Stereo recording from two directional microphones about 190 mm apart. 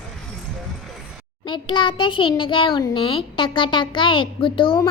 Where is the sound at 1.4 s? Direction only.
25° left (ahead or behind).